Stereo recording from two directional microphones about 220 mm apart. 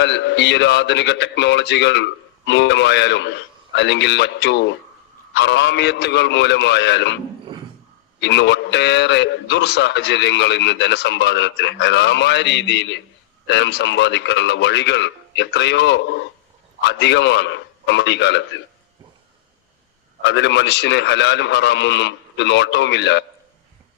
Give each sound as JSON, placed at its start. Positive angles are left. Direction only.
{"t": 0.0, "sound": "a man's voice", "side_deg": 50}
{"t": 8.2, "sound": "a man's voice", "side_deg": 50}
{"t": 20.2, "sound": "a man's voice", "side_deg": 50}